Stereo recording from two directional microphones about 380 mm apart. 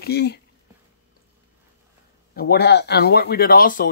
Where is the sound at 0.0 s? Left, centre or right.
Left.